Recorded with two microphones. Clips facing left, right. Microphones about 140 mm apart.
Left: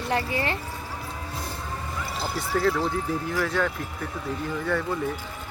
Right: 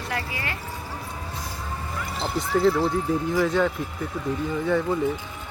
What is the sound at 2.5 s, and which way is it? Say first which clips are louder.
Speech: right 4 dB; 15° right (ahead or behind).